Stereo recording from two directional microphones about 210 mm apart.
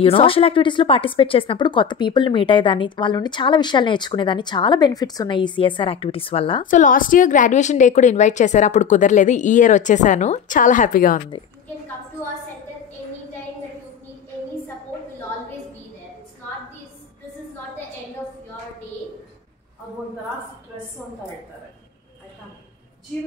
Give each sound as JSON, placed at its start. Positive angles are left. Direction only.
{"t": 0.0, "sound": "speech", "side_deg": 25}
{"t": 6.6, "sound": "a woman's voice", "side_deg": 40}